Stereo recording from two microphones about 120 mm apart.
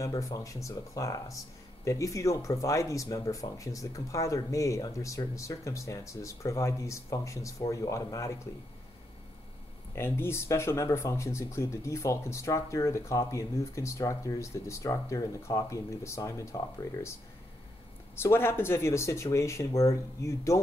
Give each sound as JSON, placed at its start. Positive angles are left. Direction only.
{"t": 0.0, "sound": "speech", "side_deg": 25}
{"t": 9.9, "sound": "speech", "side_deg": 20}
{"t": 18.1, "sound": "speech", "side_deg": 20}